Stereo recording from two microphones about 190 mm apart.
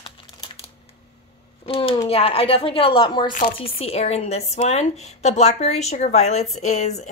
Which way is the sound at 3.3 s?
45° left (ahead or behind).